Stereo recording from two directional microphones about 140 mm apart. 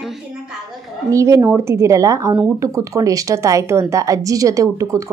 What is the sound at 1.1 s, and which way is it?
A woman's voice, 20° right (ahead or behind).